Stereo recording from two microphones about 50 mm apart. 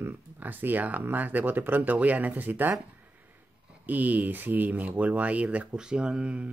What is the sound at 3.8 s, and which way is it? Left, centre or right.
Speech, right.